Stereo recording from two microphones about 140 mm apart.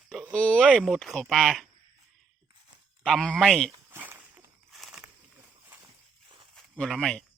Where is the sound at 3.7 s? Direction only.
15° right (ahead or behind).